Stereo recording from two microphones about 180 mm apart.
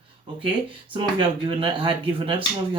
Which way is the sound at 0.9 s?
30° right (ahead or behind).